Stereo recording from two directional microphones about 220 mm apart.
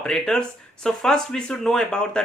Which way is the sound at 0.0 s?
5° left (ahead or behind).